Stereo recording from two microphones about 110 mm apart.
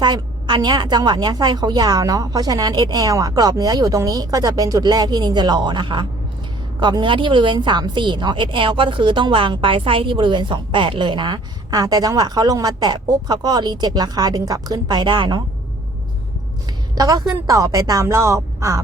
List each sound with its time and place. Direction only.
0.0 s a woman's voice: 45° right (ahead or behind)
16.9 s a woman's voice: 35° right (ahead or behind)